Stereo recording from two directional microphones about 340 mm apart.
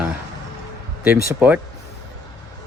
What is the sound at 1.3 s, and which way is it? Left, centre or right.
Speech, centre.